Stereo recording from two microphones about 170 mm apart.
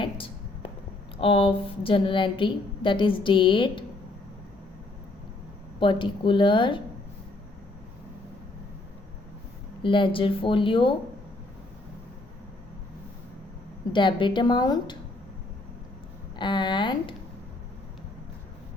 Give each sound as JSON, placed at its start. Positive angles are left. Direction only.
{"t": 0.0, "sound": "a sound", "side_deg": 30}
{"t": 1.2, "sound": "a woman's voice", "side_deg": 30}
{"t": 5.8, "sound": "a woman's voice", "side_deg": 30}
{"t": 9.8, "sound": "speech", "side_deg": 30}
{"t": 13.9, "sound": "a woman's voice", "side_deg": 30}
{"t": 16.4, "sound": "a woman's voice", "side_deg": 25}